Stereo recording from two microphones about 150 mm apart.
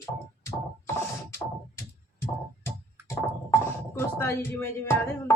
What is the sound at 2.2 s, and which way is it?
Music, 15° left (ahead or behind).